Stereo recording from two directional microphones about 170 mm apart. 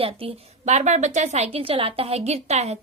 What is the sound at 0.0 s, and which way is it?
A woman's voice, 35° right (ahead or behind).